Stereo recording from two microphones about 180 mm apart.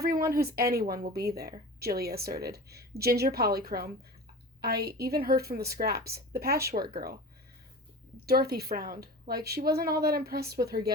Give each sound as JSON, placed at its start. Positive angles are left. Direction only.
{"t": 0.0, "sound": "a woman's voice", "side_deg": -60}
{"t": 8.3, "sound": "a woman's voice", "side_deg": -60}